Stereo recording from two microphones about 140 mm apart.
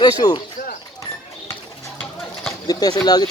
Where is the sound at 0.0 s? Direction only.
30° left (ahead or behind).